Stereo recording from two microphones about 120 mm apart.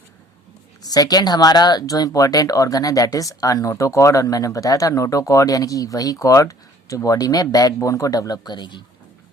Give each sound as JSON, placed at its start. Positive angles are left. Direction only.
{"t": 0.8, "sound": "speech", "side_deg": 30}